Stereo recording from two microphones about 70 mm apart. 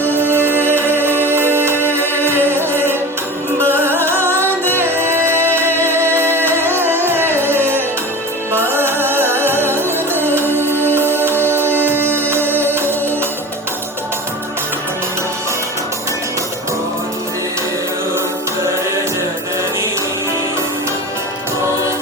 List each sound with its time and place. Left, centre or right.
0.0 s music: right
4.0 s music: right